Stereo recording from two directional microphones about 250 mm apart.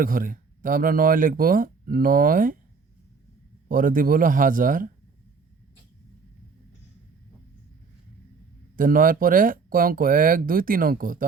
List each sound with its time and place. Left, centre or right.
0.0 s speech: right
3.7 s speech: right
8.7 s speech: right